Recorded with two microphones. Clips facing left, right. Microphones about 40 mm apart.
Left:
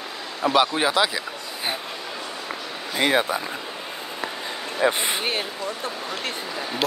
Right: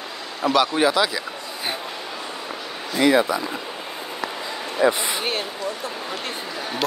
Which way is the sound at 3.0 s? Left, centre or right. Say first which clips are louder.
Right 4 dB; left.